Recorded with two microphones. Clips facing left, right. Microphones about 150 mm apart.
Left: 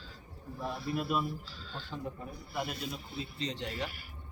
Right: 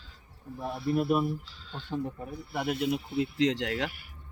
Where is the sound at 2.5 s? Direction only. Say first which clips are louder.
Right 9 dB; 60° right (ahead or behind); by 3.9 s 90° right.